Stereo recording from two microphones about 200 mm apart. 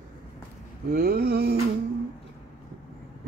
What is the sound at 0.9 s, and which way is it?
Speech, 50° right (ahead or behind).